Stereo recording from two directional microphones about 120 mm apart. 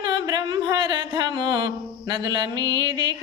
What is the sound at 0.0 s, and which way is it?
Music, 35° right (ahead or behind).